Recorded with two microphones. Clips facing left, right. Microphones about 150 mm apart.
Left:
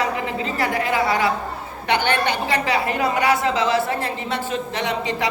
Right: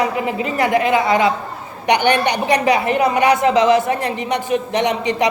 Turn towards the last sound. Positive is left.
turn(degrees=-20)  # may be behind; listen again after turning